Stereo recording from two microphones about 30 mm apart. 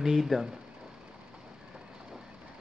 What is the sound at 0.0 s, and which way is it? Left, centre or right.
Speech, centre.